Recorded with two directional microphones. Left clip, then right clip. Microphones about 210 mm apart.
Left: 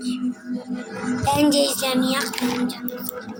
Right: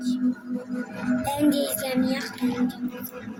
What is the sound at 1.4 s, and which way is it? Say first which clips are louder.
Music: left 5 dB; 20° left (ahead or behind).